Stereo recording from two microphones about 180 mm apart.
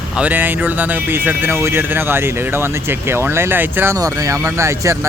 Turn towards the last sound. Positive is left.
turn(degrees=-15)  # may be behind; listen again after turning